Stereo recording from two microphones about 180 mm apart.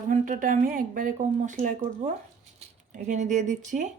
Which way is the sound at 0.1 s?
50° right (ahead or behind).